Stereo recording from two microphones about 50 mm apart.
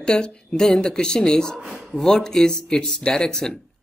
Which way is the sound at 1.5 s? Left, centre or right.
Centre.